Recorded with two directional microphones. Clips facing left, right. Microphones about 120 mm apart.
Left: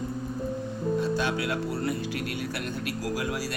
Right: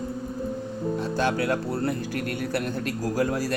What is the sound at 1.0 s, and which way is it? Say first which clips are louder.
Speech: right 4 dB; 45° right (ahead or behind).